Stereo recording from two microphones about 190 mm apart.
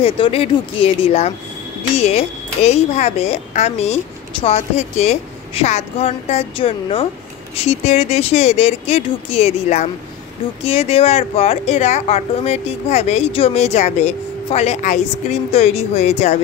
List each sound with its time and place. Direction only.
0.0 s a woman's voice: 30° left (ahead or behind)